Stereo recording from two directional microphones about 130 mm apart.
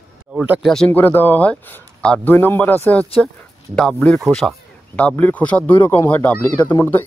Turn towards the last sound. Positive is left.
turn(degrees=15)  # may be behind; listen again after turning